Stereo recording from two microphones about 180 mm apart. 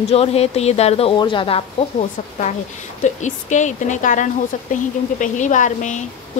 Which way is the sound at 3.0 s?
40° left (ahead or behind).